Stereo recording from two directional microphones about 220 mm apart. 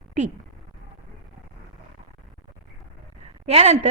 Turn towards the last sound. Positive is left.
turn(degrees=-30)  # may be behind; listen again after turning